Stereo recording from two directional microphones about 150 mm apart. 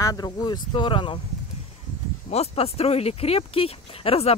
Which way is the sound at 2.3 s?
45° left (ahead or behind).